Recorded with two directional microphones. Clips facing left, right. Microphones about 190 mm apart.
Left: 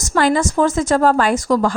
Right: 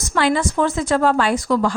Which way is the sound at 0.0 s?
45° left (ahead or behind).